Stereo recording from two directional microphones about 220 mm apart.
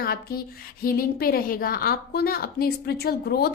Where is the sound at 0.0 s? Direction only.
45° left (ahead or behind).